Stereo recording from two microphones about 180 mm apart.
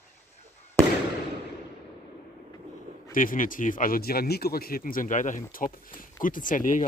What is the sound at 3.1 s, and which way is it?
Speech, 50° left (ahead or behind).